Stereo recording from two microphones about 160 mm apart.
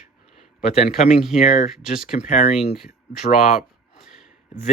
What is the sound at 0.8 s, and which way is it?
Speech, 45° left (ahead or behind).